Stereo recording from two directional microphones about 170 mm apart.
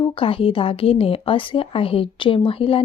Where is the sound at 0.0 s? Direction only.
30° left (ahead or behind).